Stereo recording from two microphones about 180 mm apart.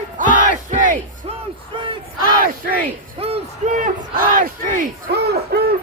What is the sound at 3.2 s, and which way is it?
Crowd, 35° right (ahead or behind).